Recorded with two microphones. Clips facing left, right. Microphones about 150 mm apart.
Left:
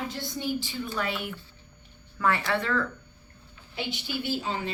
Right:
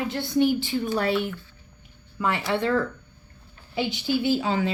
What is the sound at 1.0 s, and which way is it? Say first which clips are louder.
Speech: right 5 dB; 30° right (ahead or behind).